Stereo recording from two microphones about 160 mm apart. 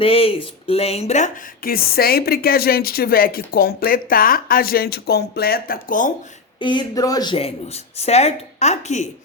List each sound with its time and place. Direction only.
0.0 s speech: 35° left (ahead or behind)
1.6 s speech: 70° left (ahead or behind)
6.6 s speech: 30° left (ahead or behind)
7.3 s speech: 40° left (ahead or behind)